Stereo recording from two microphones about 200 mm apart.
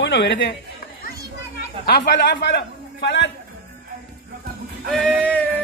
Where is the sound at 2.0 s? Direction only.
60° left (ahead or behind).